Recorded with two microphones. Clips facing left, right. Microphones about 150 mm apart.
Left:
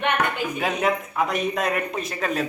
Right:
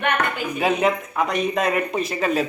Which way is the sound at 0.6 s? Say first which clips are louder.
Right 4 dB; centre (ahead or behind).